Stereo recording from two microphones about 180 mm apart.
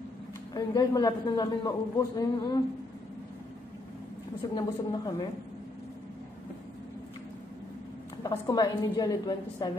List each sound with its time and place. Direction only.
0.6 s a man's voice: 20° left (ahead or behind)
4.4 s a man's voice: 25° left (ahead or behind)
8.2 s a man's voice: 20° left (ahead or behind)